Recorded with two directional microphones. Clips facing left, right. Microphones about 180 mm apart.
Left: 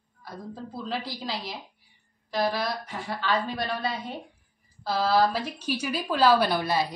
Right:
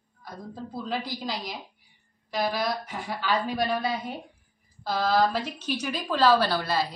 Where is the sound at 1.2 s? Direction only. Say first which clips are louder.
Right 1 dB; centre (ahead or behind).